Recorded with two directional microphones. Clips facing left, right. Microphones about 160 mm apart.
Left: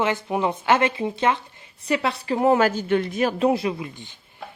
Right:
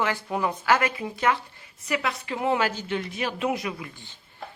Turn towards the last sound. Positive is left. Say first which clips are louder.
# left 3 dB
turn(degrees=15)  # may be behind; listen again after turning